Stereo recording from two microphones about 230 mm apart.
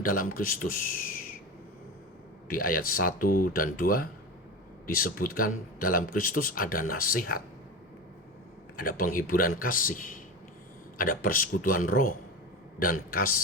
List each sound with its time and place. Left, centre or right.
0.0 s a man's voice: left
2.5 s a man's voice: left
8.7 s a man's voice: left